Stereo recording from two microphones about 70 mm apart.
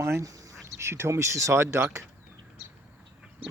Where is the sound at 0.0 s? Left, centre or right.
Right.